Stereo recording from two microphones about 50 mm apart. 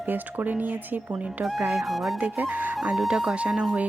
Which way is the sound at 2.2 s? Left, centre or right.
Right.